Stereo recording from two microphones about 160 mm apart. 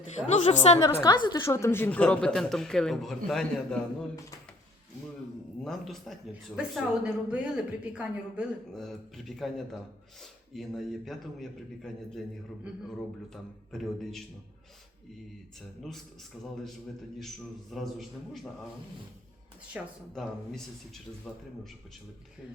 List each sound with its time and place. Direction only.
0.3 s a woman's voice: 45° left (ahead or behind)
0.8 s a woman's voice: 30° left (ahead or behind); by 3.8 s centre (ahead or behind)
5.6 s a woman's voice: centre (ahead or behind)
13.3 s a woman's voice: centre (ahead or behind)
17.2 s a woman's voice: centre (ahead or behind)
19.8 s speech: 10° right (ahead or behind)
20.1 s a woman's voice: centre (ahead or behind)